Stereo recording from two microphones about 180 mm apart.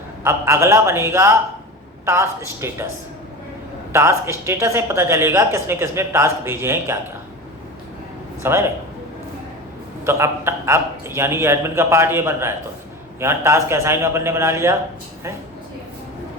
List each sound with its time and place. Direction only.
0.3 s speech: 15° right (ahead or behind)
3.9 s speech: 15° right (ahead or behind)
8.4 s speech: 15° right (ahead or behind)
10.1 s speech: 15° right (ahead or behind)